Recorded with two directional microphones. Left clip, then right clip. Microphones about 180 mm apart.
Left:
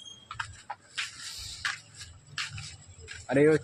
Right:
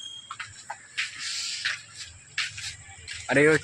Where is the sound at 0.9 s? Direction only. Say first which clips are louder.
Right 7 dB; 5° right (ahead or behind).